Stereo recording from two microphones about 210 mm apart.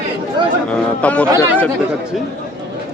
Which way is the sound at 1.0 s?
5° left (ahead or behind).